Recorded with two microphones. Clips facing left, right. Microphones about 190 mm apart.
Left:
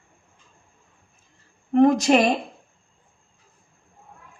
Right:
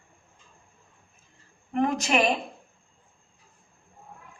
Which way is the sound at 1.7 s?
35° left (ahead or behind).